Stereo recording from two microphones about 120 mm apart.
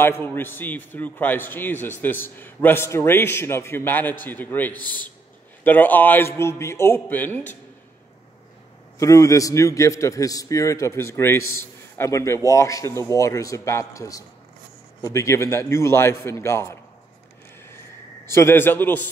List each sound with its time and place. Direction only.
0.0 s a man's voice: 20° left (ahead or behind)
9.0 s a man's voice: 25° left (ahead or behind)
18.3 s a man's voice: 20° left (ahead or behind)